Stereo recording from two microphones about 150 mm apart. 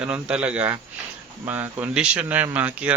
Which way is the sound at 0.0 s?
5° right (ahead or behind).